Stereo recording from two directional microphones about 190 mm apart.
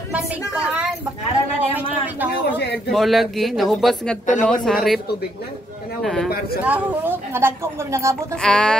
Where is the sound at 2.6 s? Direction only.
60° left (ahead or behind).